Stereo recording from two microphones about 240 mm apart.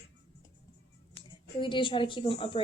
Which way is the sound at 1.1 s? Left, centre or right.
Left.